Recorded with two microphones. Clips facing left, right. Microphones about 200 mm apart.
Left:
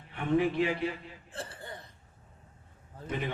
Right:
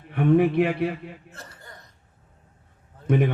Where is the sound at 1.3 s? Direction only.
30° left (ahead or behind).